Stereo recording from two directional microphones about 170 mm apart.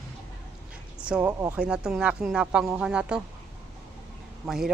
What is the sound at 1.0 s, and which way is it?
Speech, 5° right (ahead or behind).